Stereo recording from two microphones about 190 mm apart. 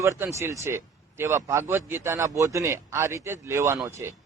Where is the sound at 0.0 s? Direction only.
15° right (ahead or behind).